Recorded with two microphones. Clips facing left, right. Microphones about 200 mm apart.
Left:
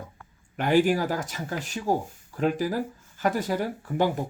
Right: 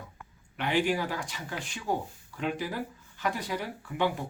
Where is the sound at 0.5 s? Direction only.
45° left (ahead or behind).